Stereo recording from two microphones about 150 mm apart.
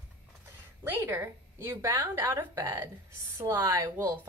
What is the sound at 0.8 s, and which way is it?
A woman's voice, 15° right (ahead or behind).